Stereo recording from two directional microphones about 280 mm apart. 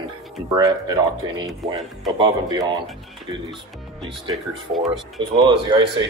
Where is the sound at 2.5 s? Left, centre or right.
Centre.